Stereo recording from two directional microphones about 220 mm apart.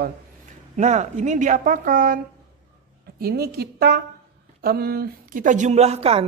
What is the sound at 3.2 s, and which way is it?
A man's voice, 45° right (ahead or behind).